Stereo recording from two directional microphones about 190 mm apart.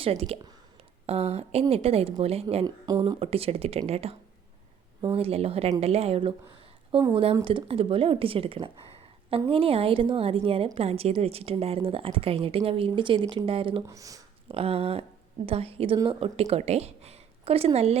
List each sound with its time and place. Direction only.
0.0 s speech: 30° right (ahead or behind)
2.6 s a woman's voice: 20° right (ahead or behind)
13.8 s a sound: 15° right (ahead or behind)
14.5 s a woman's voice: 30° right (ahead or behind)